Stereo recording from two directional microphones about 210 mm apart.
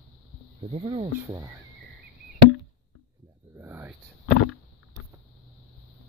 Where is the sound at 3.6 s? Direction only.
10° right (ahead or behind).